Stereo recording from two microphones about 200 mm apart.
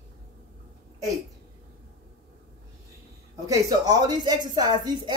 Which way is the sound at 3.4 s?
15° right (ahead or behind).